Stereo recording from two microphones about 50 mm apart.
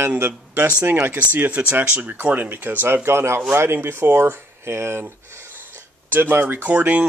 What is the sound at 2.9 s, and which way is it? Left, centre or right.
Speech, right.